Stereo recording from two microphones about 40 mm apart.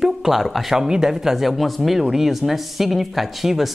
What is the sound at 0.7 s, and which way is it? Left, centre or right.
Speech, centre.